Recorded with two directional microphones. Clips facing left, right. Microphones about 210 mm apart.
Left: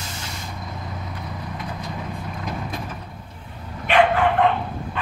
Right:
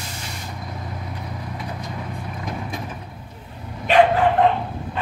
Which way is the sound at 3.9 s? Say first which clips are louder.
Right 2 dB; 35° right (ahead or behind).